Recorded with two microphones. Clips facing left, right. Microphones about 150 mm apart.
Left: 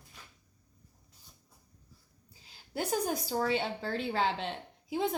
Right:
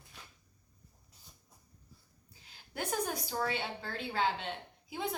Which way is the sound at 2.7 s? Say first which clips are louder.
Left 4 dB; 35° left (ahead or behind).